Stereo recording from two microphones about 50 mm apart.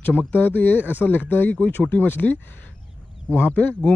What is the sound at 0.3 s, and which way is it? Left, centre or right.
Speech, left.